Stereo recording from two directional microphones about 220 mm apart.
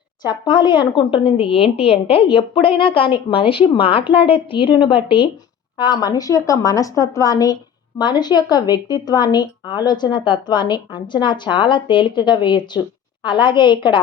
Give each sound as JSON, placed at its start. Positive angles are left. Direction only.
{"t": 0.3, "sound": "speech", "side_deg": 20}